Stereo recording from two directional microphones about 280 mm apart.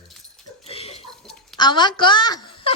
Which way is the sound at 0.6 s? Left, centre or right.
Left.